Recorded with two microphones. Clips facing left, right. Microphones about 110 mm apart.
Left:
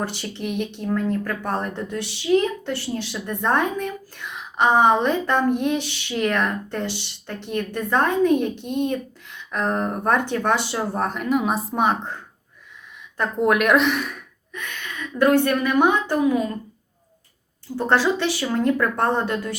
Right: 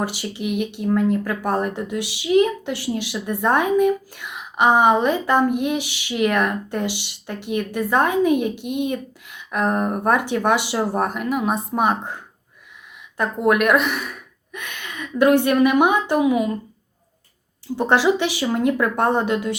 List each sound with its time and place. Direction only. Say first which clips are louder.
0.0 s speech: right 2 dB; 10° right (ahead or behind)
14.5 s a sound: even; 15° right (ahead or behind)
15.2 s speech: right 3 dB; 15° right (ahead or behind)
17.7 s speech: right 2 dB; 15° right (ahead or behind)